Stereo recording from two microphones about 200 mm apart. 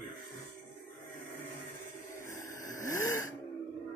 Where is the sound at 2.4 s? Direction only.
15° left (ahead or behind).